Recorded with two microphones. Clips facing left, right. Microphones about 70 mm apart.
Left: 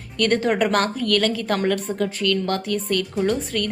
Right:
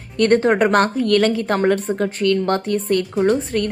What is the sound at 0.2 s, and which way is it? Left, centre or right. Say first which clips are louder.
Speech: right 5 dB; right.